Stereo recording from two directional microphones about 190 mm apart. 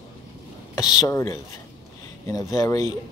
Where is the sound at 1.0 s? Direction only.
15° left (ahead or behind).